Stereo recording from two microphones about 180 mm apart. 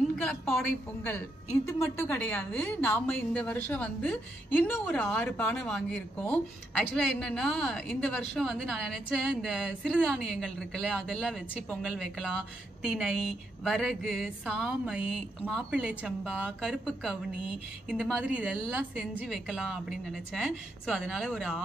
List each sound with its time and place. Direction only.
0.2 s a woman's voice: 5° left (ahead or behind)
1.7 s a woman's voice: 15° left (ahead or behind)
12.8 s a woman's voice: centre (ahead or behind)
16.3 s a woman's voice: 5° left (ahead or behind)